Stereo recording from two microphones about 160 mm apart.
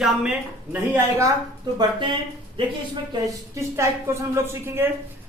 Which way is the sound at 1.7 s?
30° right (ahead or behind).